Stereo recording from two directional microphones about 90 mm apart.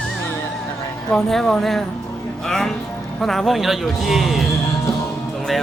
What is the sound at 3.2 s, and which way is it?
Speech, 5° left (ahead or behind).